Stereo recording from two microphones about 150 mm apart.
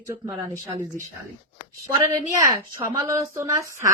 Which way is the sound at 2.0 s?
20° right (ahead or behind).